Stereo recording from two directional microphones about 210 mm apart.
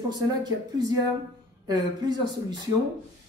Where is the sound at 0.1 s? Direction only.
20° right (ahead or behind).